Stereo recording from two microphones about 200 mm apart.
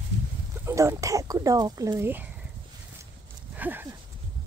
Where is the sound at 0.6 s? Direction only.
15° right (ahead or behind).